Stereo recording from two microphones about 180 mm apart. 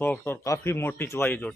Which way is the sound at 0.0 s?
10° left (ahead or behind).